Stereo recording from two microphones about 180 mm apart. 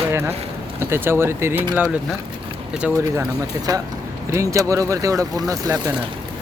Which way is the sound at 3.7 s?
20° right (ahead or behind).